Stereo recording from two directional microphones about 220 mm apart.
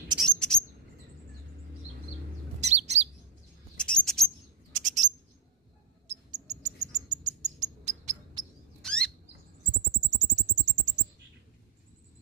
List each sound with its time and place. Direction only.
0.2 s chirp: 5° left (ahead or behind)
2.6 s chirp: 30° right (ahead or behind)
3.7 s bird: 5° left (ahead or behind)
4.7 s bird: 35° right (ahead or behind)
6.3 s cricket: 30° right (ahead or behind)
8.8 s rodents: 5° left (ahead or behind)
10.1 s a sound: 35° right (ahead or behind)